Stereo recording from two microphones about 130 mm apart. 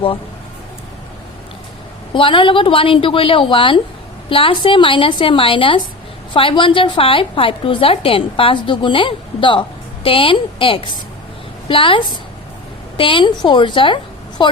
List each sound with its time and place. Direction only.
2.1 s a woman's voice: 40° left (ahead or behind)